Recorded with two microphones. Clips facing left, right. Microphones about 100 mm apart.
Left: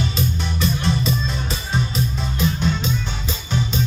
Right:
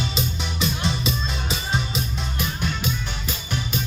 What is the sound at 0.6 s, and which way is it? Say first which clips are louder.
Music: left 3 dB; 90° right.